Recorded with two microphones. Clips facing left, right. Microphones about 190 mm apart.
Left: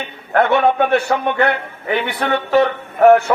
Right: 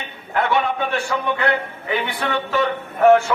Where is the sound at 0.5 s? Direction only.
65° left (ahead or behind).